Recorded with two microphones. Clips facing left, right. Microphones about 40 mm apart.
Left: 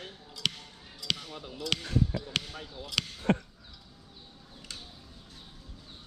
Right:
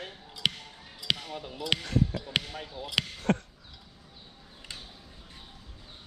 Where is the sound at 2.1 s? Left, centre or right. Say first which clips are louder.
Right 2 dB; centre.